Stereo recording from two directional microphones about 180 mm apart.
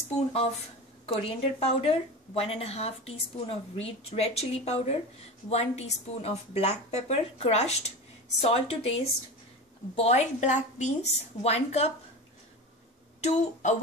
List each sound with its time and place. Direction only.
1.0 s speech: 35° left (ahead or behind)
13.2 s speech: 40° left (ahead or behind)